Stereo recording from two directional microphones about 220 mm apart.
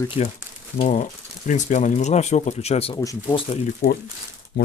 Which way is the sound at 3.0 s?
15° left (ahead or behind).